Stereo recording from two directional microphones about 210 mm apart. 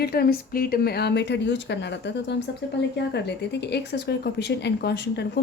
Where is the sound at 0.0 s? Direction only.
45° left (ahead or behind).